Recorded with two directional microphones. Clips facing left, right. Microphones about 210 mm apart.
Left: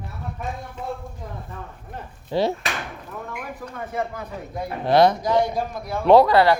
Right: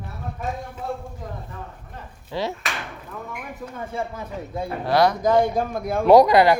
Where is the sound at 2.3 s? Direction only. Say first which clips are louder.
Left 5 dB; 30° left (ahead or behind).